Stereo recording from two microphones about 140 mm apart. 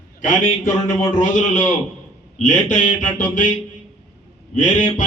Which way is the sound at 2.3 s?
65° left (ahead or behind).